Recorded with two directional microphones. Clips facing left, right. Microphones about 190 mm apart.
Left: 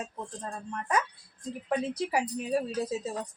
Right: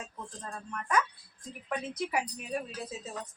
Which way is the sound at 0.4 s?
30° left (ahead or behind).